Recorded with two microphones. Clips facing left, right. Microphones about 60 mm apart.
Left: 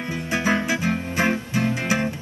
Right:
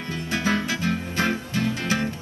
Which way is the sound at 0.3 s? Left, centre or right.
Left.